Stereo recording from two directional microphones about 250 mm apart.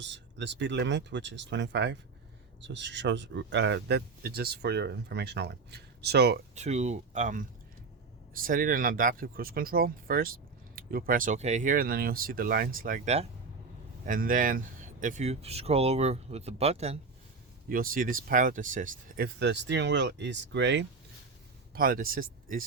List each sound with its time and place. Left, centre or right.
0.0 s speech: right
6.5 s speech: right
21.8 s speech: right